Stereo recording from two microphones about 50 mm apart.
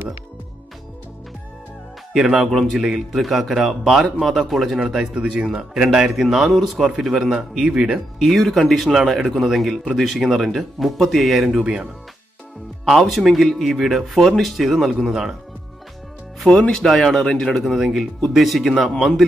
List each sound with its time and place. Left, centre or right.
2.1 s a man's voice: centre
5.1 s a man's voice: right
8.2 s speech: centre
11.6 s a man's voice: centre
13.0 s speech: centre
16.7 s speech: centre